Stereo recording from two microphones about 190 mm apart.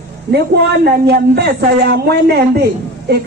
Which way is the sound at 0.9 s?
60° right (ahead or behind).